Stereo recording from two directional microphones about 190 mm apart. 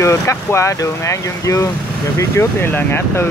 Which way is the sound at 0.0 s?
15° left (ahead or behind).